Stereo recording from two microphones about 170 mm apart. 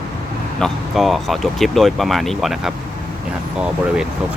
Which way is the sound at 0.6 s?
Centre (ahead or behind).